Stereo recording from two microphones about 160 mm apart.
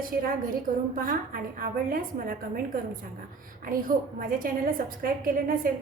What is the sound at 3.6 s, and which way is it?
A woman's voice, 60° right (ahead or behind).